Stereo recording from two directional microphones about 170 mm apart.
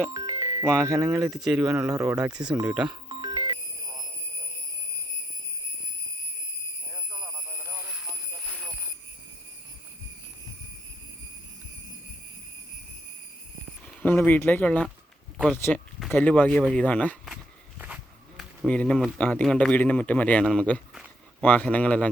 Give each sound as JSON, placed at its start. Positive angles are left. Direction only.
{"t": 0.1, "sound": "music", "side_deg": -20}
{"t": 0.8, "sound": "speech", "side_deg": -15}
{"t": 1.3, "sound": "speech", "side_deg": 0}
{"t": 2.9, "sound": "music", "side_deg": -25}
{"t": 6.9, "sound": "a sound", "side_deg": -5}
{"t": 14.2, "sound": "speech", "side_deg": 10}
{"t": 17.7, "sound": "a sound", "side_deg": -5}
{"t": 19.2, "sound": "speech", "side_deg": 5}